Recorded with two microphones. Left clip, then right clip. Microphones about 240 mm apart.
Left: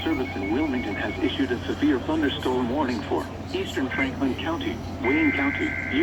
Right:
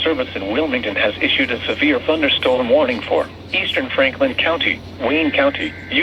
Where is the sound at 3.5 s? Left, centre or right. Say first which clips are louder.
Right 8 dB; right.